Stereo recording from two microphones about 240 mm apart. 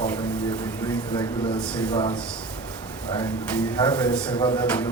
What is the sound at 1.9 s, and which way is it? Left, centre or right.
Speech, left.